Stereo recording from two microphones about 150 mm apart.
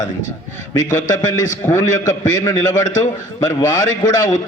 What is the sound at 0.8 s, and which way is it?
Speech, 55° left (ahead or behind).